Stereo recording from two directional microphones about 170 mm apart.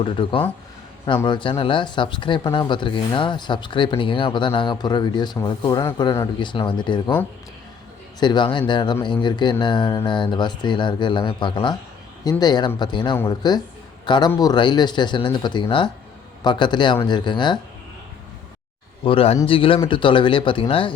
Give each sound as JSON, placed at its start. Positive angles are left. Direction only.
{"t": 0.0, "sound": "speech", "side_deg": 30}
{"t": 8.2, "sound": "speech", "side_deg": 25}
{"t": 19.0, "sound": "a man's voice", "side_deg": 35}